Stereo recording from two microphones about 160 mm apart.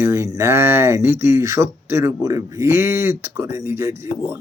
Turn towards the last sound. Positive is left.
turn(degrees=-15)  # may be behind; listen again after turning